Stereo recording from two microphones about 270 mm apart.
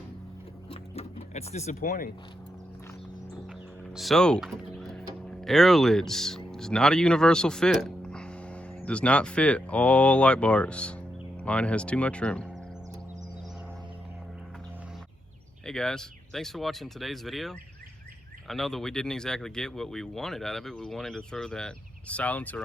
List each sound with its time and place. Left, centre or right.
0.7 s vehicle: left
3.9 s speech: centre
15.6 s speech: centre